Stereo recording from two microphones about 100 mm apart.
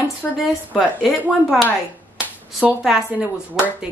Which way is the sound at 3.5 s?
5° right (ahead or behind).